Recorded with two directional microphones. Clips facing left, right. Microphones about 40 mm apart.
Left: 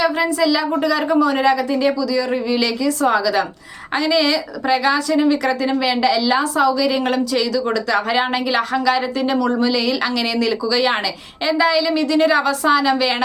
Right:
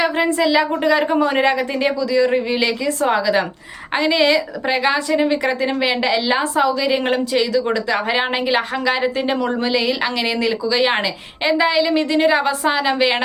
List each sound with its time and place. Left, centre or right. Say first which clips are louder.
0.0 s a woman's voice: even; right